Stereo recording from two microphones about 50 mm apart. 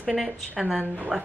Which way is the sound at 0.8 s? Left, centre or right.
Right.